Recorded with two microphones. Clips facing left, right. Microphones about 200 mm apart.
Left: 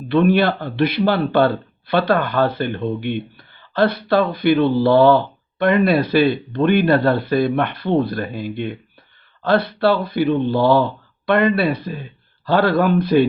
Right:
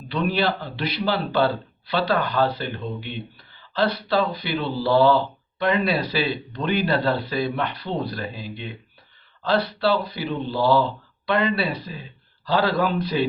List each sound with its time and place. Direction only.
0.1 s a man's voice: 55° left (ahead or behind)